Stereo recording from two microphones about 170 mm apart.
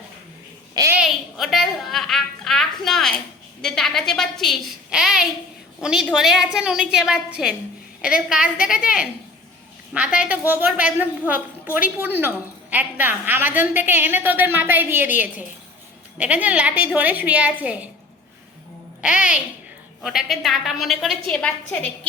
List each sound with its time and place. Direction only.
0.7 s a sound: 20° right (ahead or behind)
0.9 s music: centre (ahead or behind)
3.6 s a woman's voice: centre (ahead or behind)
9.9 s a woman's voice: 5° right (ahead or behind)
16.1 s a woman's voice: 10° right (ahead or behind)
19.0 s a woman's voice: 5° right (ahead or behind)